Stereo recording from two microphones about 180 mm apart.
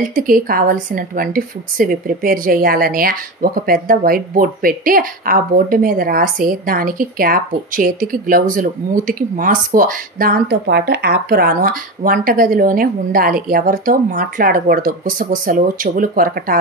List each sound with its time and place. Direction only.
0.1 s a woman's voice: 50° right (ahead or behind)
10.5 s a woman's voice: 65° right (ahead or behind)